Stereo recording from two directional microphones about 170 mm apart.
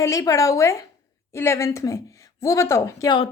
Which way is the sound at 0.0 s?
20° left (ahead or behind).